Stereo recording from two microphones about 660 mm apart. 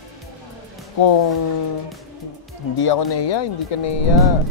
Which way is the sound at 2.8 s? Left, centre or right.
Left.